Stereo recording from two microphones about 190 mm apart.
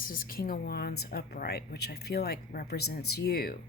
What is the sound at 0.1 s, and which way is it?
A woman's voice, 50° left (ahead or behind).